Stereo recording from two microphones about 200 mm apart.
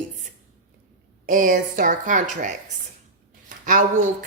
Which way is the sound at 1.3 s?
40° right (ahead or behind).